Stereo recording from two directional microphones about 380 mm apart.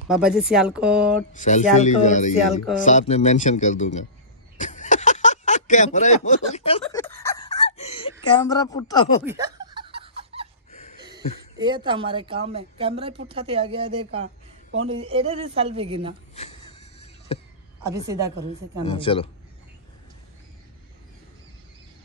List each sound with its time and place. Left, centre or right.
0.1 s speech: centre
1.3 s a man's voice: centre
4.6 s a sound: centre
9.2 s snicker: centre
11.0 s speech: centre
14.2 s a sound: right
15.1 s speech: centre
16.3 s a sound: centre
17.9 s speech: centre
18.9 s speech: centre